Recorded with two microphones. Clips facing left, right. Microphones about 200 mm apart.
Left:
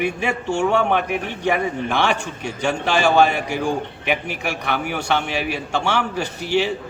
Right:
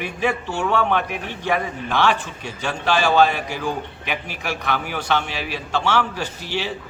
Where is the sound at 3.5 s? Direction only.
50° left (ahead or behind).